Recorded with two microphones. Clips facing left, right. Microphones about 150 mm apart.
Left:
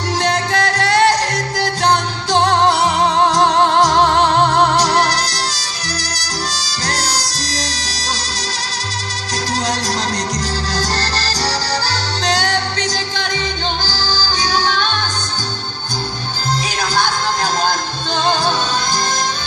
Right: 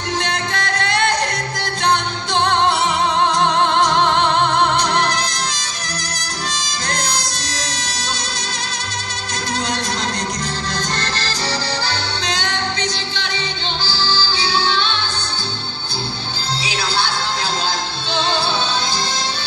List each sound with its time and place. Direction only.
0.2 s music: 35° left (ahead or behind)
11.0 s music: 40° left (ahead or behind)
14.5 s music: 45° left (ahead or behind)
16.6 s music: 45° left (ahead or behind)